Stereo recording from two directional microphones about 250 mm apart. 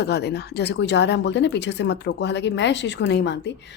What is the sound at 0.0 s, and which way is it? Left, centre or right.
Speech, left.